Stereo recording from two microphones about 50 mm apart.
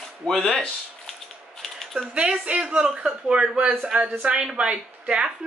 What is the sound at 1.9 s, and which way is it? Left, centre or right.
A woman's voice, right.